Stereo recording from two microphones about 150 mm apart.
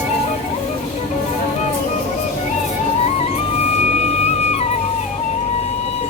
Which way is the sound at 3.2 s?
40° left (ahead or behind).